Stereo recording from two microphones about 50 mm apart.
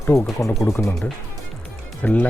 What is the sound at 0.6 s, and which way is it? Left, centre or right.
Speech, left.